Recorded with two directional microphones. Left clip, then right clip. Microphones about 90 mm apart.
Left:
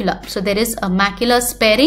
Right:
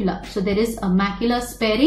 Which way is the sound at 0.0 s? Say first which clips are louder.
Left 4 dB; 20° left (ahead or behind).